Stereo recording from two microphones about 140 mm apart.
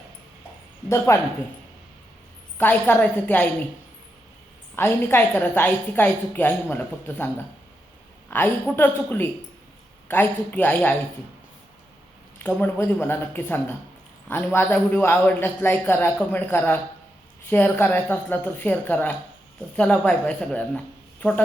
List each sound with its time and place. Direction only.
0.9 s speech: 20° left (ahead or behind)
2.6 s a man's voice: 15° left (ahead or behind)
4.8 s a man's voice: 15° left (ahead or behind)
8.3 s a man's voice: 15° left (ahead or behind)
12.4 s a man's voice: 10° left (ahead or behind)